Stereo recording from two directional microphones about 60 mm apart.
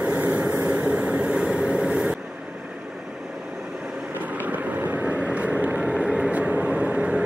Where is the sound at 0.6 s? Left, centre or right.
Centre.